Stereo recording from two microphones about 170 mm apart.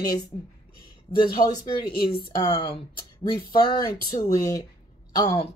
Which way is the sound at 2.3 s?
30° left (ahead or behind).